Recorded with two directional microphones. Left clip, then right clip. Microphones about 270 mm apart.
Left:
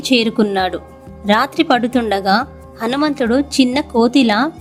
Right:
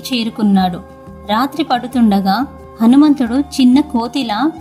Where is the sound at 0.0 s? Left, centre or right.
Centre.